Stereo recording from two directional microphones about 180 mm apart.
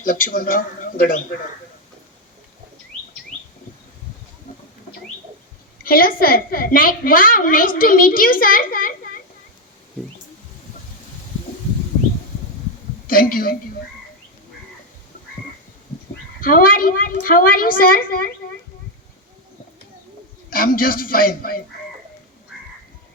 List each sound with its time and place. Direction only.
0.0 s a woman's voice: 50° left (ahead or behind)
5.8 s a woman's voice: 55° left (ahead or behind)
13.1 s a woman's voice: 50° left (ahead or behind)
16.4 s a woman's voice: 50° left (ahead or behind)
20.5 s a woman's voice: 50° left (ahead or behind)